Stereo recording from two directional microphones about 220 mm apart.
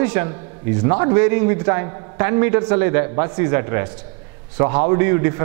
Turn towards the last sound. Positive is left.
turn(degrees=-15)  # may be behind; listen again after turning